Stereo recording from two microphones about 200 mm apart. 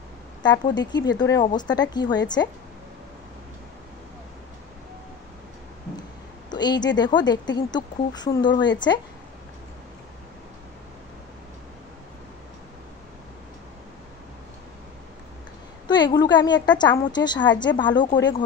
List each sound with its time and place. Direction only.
0.4 s a woman's voice: 20° left (ahead or behind)
6.5 s a woman's voice: 20° left (ahead or behind)
15.9 s a woman's voice: 20° left (ahead or behind)